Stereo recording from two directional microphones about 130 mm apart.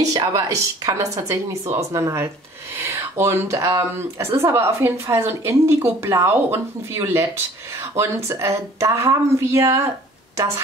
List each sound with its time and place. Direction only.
0.0 s a woman's voice: 30° right (ahead or behind)